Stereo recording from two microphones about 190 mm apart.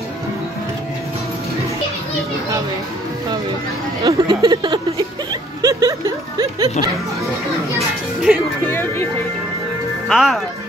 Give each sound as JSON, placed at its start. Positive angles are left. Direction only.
{"t": 4.0, "sound": "a sound", "side_deg": -20}
{"t": 8.3, "sound": "music", "side_deg": -5}
{"t": 8.6, "sound": "music", "side_deg": 10}
{"t": 10.0, "sound": "speech", "side_deg": 0}